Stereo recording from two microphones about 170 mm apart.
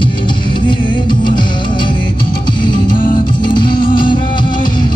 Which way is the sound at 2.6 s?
25° left (ahead or behind).